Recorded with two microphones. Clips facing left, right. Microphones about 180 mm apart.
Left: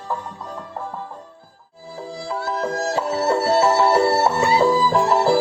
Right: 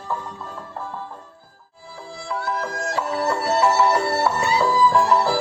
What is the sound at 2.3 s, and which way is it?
Music, 25° left (ahead or behind).